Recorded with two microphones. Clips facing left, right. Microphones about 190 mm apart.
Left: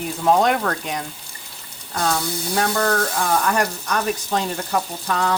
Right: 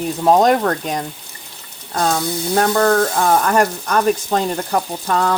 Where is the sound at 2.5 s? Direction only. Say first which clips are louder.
Right 6 dB; 50° right (ahead or behind).